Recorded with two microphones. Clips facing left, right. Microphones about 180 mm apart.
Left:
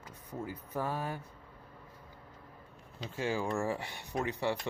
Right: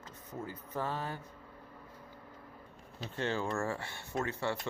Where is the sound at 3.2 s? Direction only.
10° left (ahead or behind).